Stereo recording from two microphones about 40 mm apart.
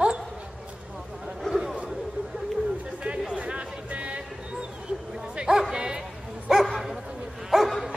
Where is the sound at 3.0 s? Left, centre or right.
Right.